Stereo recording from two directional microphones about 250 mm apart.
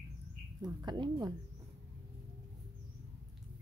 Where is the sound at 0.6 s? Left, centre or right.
Centre.